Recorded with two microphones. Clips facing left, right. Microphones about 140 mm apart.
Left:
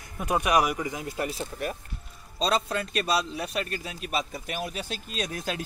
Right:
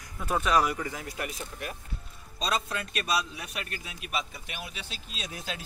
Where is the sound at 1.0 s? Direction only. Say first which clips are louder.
Left 5 dB; 30° left (ahead or behind).